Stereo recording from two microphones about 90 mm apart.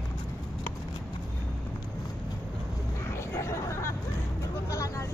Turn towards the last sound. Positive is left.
turn(degrees=35)  # may be behind; listen again after turning